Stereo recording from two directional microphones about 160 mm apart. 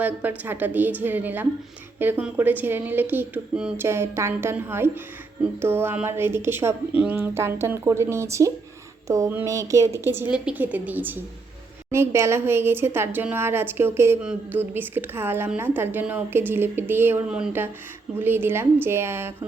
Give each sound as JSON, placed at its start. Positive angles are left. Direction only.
{"t": 0.0, "sound": "a woman's voice", "side_deg": -10}